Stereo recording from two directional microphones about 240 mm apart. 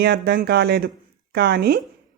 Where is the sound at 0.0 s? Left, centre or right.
Right.